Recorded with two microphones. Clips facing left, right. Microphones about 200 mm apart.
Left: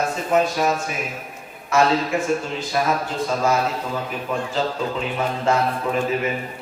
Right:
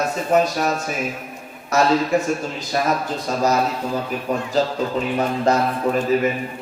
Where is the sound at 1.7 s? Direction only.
40° right (ahead or behind).